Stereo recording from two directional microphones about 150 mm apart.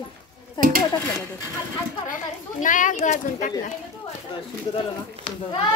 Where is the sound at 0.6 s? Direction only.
30° left (ahead or behind).